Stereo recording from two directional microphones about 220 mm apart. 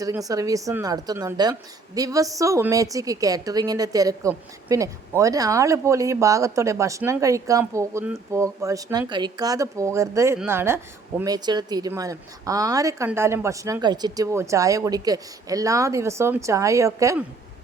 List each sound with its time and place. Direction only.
0.0 s a woman's voice: 15° right (ahead or behind)